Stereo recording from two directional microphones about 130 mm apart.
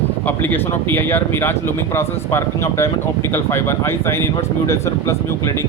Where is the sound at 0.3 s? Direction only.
15° left (ahead or behind).